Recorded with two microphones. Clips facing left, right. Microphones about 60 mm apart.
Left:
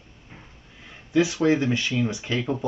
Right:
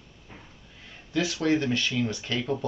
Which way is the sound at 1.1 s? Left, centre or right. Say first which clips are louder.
Left 5 dB; centre.